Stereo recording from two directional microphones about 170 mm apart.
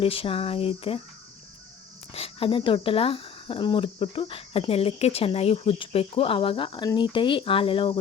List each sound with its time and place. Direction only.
0.0 s speech: 35° left (ahead or behind)
2.1 s speech: 35° left (ahead or behind)